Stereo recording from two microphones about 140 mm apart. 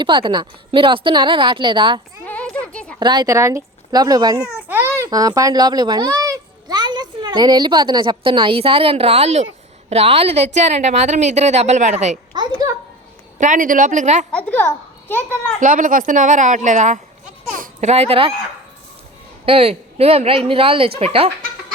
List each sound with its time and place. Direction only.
0.0 s a woman's voice: 35° right (ahead or behind)
2.2 s a sound: 10° left (ahead or behind)
3.0 s a child's voice: 30° right (ahead or behind)
4.4 s babbling: 15° right (ahead or behind)
5.0 s a child's voice: 25° right (ahead or behind); by 12.1 s 55° right (ahead or behind)
13.4 s a woman's voice: 70° right (ahead or behind)
14.3 s a child's voice: 15° left (ahead or behind)
15.6 s a woman's voice: 70° right (ahead or behind); by 18.3 s 40° right (ahead or behind)
19.5 s speech: 45° right (ahead or behind)